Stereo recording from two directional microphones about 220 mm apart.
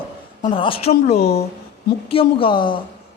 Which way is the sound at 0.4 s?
25° left (ahead or behind).